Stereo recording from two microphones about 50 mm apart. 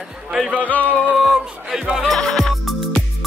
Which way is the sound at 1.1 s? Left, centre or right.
Centre.